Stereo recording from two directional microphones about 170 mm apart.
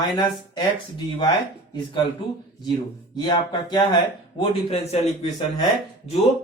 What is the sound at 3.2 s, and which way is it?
Speech, 25° left (ahead or behind).